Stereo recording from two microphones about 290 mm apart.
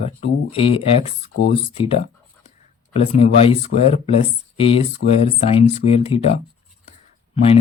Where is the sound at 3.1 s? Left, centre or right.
Centre.